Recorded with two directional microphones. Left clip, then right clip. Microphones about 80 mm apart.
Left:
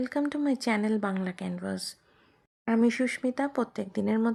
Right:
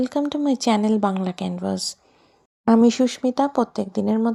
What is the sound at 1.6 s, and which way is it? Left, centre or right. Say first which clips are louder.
A woman's voice: right 11 dB; right.